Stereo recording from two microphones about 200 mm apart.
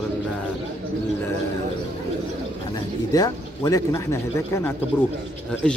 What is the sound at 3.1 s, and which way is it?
Speech, 20° left (ahead or behind).